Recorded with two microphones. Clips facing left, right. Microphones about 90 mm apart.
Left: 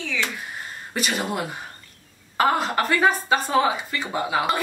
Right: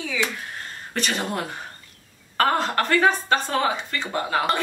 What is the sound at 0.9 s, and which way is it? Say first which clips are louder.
A woman's voice: left 1 dB; 5° left (ahead or behind).